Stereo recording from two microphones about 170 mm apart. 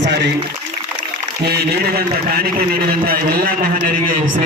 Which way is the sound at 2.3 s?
60° right (ahead or behind).